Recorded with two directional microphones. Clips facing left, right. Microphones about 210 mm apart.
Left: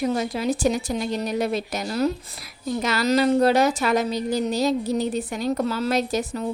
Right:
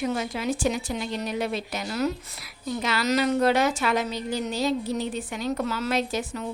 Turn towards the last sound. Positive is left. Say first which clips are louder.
# left 4 dB
turn(degrees=40)  # may be behind; listen again after turning